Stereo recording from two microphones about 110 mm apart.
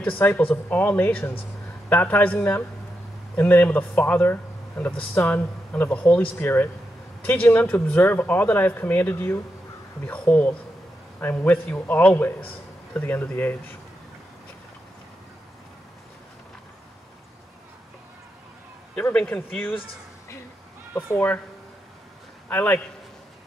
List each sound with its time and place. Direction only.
0.2 s a man's voice: 20° left (ahead or behind)
18.9 s speech: 10° left (ahead or behind)
20.9 s speech: 20° left (ahead or behind)
22.5 s speech: 10° left (ahead or behind)